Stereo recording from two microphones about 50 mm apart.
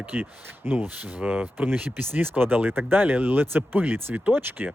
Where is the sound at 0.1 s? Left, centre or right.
Right.